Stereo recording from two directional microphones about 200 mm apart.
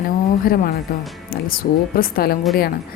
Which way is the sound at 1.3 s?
45° left (ahead or behind).